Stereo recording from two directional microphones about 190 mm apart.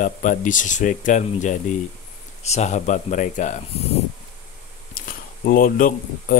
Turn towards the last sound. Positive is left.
turn(degrees=45)  # may be behind; listen again after turning